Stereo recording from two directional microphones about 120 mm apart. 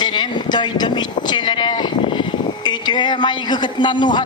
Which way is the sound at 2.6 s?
40° left (ahead or behind).